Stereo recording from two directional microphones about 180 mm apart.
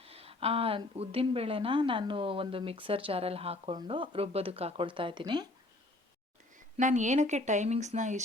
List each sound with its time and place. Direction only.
0.0 s speech: 35° right (ahead or behind)
6.7 s speech: 45° right (ahead or behind)